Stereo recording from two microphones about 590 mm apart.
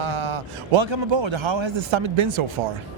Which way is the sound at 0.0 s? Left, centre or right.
Right.